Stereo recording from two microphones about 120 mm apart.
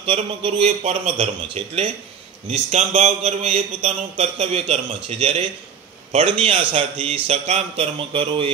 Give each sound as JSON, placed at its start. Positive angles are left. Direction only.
{"t": 0.0, "sound": "a man's voice", "side_deg": -50}
{"t": 5.2, "sound": "a man's voice", "side_deg": -50}